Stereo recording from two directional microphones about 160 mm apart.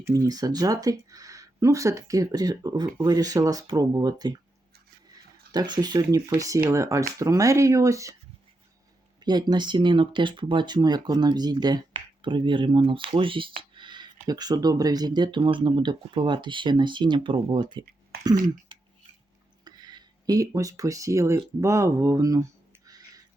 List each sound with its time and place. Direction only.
0.0 s speech: 20° right (ahead or behind)
5.5 s speech: 25° right (ahead or behind)
9.2 s speech: 25° right (ahead or behind)
19.6 s speech: 25° right (ahead or behind)